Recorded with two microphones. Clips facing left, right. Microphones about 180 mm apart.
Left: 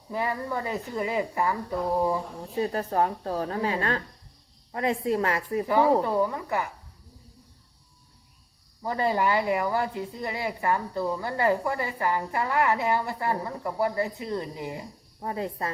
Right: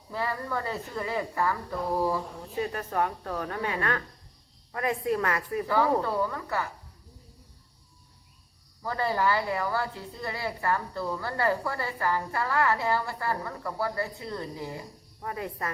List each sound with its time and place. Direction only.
0.1 s a woman's voice: 15° left (ahead or behind)
2.6 s a woman's voice: 35° left (ahead or behind); by 6.7 s 15° left (ahead or behind)
8.8 s a woman's voice: 20° left (ahead or behind)